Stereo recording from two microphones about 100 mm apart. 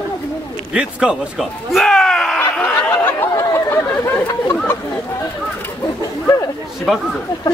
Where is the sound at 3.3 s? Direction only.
30° left (ahead or behind).